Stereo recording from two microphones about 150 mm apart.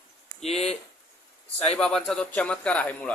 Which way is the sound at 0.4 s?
45° left (ahead or behind).